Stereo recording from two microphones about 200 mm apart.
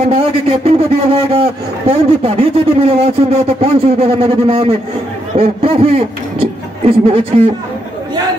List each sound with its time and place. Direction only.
0.1 s a man's voice: 30° right (ahead or behind)